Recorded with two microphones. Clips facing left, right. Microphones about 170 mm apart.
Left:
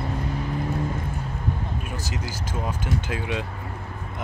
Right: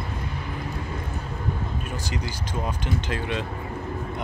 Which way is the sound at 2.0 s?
5° left (ahead or behind).